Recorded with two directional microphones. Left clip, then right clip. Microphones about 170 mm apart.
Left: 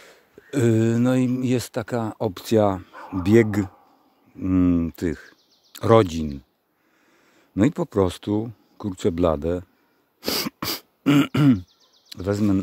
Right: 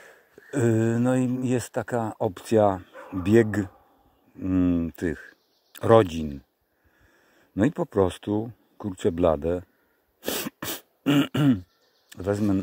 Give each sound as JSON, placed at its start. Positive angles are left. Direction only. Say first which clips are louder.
{"t": 0.0, "sound": "speech", "louder": "left 1 dB", "side_deg": 20}
{"t": 7.5, "sound": "speech", "louder": "left 2 dB", "side_deg": 15}
{"t": 10.4, "sound": "beatboxing", "louder": "left 5 dB", "side_deg": 20}
{"t": 12.2, "sound": "speech", "louder": "left 2 dB", "side_deg": 20}